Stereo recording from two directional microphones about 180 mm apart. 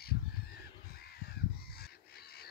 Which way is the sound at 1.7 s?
60° left (ahead or behind).